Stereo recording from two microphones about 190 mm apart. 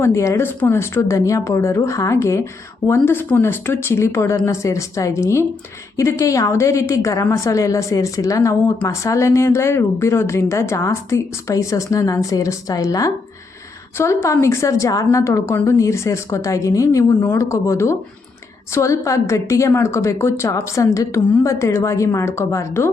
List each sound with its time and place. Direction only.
0.0 s a woman's voice: 15° left (ahead or behind)